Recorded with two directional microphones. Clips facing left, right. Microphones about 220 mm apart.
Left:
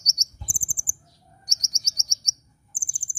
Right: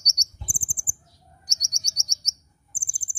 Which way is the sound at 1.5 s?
Centre (ahead or behind).